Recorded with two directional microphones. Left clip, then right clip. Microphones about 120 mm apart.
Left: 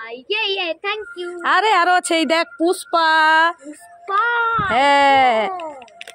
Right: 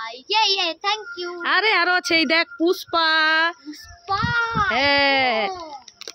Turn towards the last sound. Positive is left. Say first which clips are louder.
# left 5 dB
turn(degrees=-5)  # may be behind; listen again after turning